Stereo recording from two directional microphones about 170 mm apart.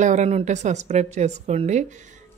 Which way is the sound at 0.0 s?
45° right (ahead or behind).